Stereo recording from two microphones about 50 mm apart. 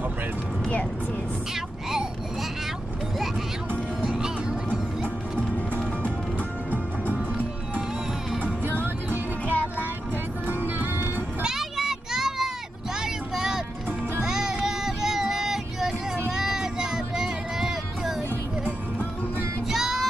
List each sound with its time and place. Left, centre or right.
4.0 s music: centre
6.7 s music: right
11.4 s children playing: centre
13.0 s vehicle: centre
14.2 s child singing: centre
19.7 s music: centre